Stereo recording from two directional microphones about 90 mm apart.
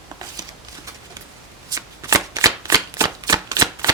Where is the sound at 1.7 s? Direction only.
40° right (ahead or behind).